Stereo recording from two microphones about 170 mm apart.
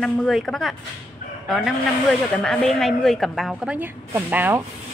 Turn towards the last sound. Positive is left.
turn(degrees=-10)  # may be behind; listen again after turning